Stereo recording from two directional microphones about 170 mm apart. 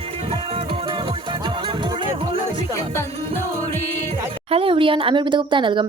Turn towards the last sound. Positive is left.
turn(degrees=-30)  # may be behind; listen again after turning